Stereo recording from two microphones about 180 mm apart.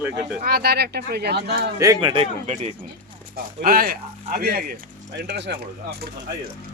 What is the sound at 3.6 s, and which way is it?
Speech, 55° right (ahead or behind).